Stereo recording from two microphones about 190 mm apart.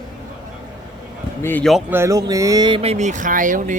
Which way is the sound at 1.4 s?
5° left (ahead or behind).